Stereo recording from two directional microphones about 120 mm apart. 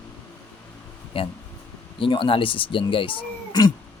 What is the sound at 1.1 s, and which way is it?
Speech, 50° left (ahead or behind).